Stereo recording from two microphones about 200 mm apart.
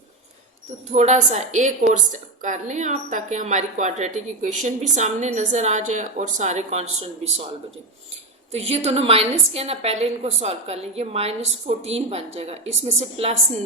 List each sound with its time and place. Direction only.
0.9 s a woman's voice: 35° right (ahead or behind)
8.5 s a woman's voice: 30° right (ahead or behind)